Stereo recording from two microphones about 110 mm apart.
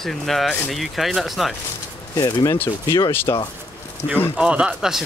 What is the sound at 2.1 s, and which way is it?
Speech, 35° left (ahead or behind).